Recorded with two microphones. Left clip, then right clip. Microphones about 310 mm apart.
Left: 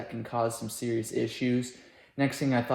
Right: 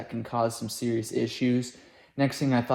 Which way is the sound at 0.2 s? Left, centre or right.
Centre.